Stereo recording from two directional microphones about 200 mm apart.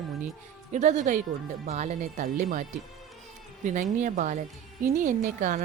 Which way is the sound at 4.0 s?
40° right (ahead or behind).